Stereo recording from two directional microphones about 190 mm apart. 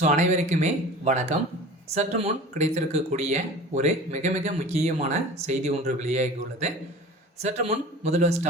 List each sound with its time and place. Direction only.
0.0 s speech: 40° right (ahead or behind)